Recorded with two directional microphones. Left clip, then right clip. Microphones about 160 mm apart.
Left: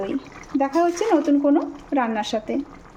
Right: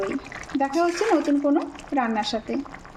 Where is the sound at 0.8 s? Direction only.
5° left (ahead or behind).